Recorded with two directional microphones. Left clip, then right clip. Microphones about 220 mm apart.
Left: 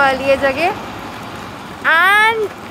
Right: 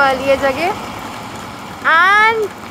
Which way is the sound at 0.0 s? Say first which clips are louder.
Even; centre (ahead or behind).